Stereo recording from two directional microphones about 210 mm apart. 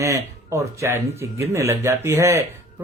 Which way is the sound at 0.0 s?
15° right (ahead or behind).